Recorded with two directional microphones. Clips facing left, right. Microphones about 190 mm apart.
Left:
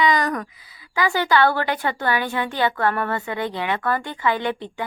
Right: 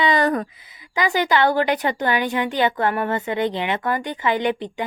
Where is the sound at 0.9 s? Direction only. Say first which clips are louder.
Even; 20° right (ahead or behind).